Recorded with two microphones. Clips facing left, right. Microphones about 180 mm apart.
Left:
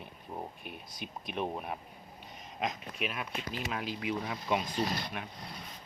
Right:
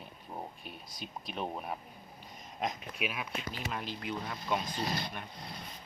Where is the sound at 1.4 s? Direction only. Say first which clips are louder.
Left 2 dB; 5° left (ahead or behind).